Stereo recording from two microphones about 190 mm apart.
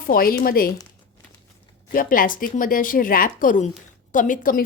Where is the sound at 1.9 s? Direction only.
45° left (ahead or behind).